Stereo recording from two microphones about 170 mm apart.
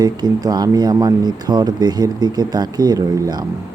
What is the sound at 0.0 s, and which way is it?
Speech, 25° right (ahead or behind).